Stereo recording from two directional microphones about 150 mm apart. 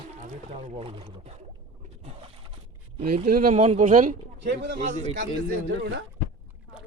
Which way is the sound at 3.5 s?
50° right (ahead or behind).